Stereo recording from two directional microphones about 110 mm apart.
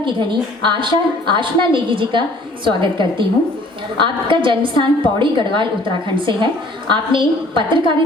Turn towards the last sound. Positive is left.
turn(degrees=-50)  # may be behind; listen again after turning